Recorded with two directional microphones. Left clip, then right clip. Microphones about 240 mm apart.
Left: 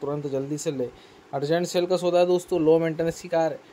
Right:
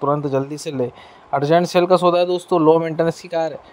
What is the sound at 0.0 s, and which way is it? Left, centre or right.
Speech, right.